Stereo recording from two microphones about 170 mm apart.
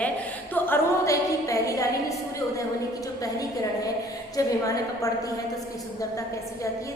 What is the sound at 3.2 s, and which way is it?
Speech, 20° left (ahead or behind).